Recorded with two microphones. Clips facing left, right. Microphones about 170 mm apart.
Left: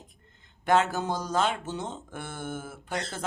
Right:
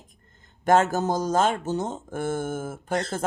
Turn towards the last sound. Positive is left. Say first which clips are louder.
# right 7 dB
turn(degrees=-45)  # may be behind; listen again after turning